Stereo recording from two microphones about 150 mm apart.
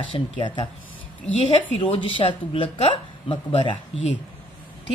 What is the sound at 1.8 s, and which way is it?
A woman's voice, 35° left (ahead or behind).